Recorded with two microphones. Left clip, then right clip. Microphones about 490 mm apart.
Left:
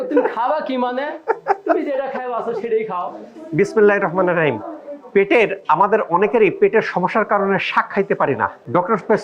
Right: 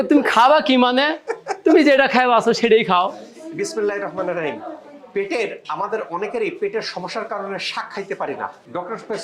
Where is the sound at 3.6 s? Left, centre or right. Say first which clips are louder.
Left 8 dB; left.